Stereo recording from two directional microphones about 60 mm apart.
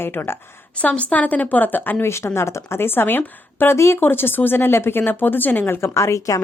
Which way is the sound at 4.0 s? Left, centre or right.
Left.